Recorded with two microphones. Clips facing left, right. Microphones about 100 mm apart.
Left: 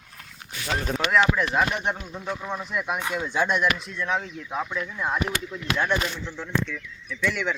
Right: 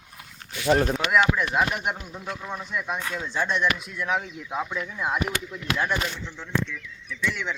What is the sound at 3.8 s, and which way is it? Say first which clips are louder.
Speech: even; 5° right (ahead or behind).